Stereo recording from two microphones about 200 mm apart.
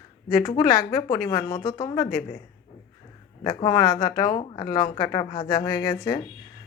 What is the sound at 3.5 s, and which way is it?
A woman's voice, 20° left (ahead or behind).